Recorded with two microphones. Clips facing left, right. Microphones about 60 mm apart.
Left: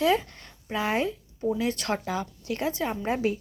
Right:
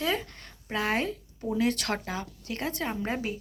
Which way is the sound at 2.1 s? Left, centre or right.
Right.